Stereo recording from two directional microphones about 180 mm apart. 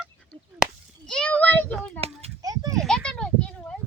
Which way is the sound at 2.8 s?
5° left (ahead or behind).